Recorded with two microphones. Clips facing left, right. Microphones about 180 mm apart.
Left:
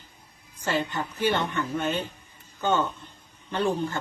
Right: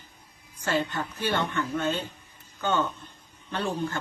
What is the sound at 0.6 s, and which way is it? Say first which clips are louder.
A woman's voice: even; 15° left (ahead or behind).